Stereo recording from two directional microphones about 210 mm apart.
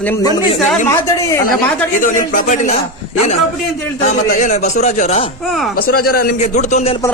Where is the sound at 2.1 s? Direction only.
40° left (ahead or behind).